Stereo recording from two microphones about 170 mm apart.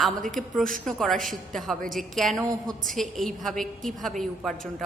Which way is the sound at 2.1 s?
Centre (ahead or behind).